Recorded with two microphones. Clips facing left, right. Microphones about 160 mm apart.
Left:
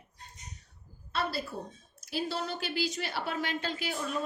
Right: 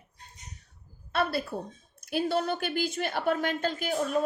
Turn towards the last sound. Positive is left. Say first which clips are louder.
# right 6 dB
turn(degrees=-45)  # may be behind; listen again after turning